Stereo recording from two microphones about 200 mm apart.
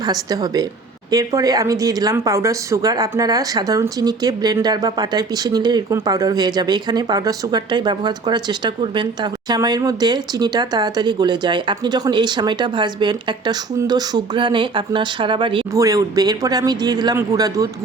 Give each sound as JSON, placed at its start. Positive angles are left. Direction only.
{"t": 0.0, "sound": "a woman's voice", "side_deg": -20}